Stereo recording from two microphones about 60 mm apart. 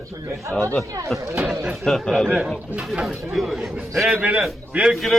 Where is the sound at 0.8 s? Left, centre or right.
Right.